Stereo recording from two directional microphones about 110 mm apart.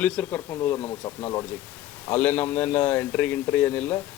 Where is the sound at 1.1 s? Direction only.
35° left (ahead or behind).